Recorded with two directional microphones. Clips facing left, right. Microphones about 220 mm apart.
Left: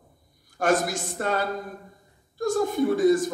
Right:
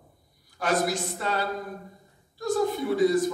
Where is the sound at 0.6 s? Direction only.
50° left (ahead or behind).